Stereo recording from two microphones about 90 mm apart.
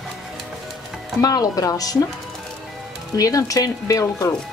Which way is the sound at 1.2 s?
45° left (ahead or behind).